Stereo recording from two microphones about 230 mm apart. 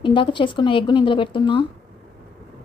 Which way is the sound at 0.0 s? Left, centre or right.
Left.